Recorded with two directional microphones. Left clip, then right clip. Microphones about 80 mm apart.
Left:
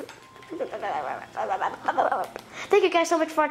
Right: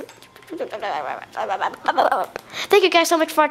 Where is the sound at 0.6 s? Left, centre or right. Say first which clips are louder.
Right 4 dB; right.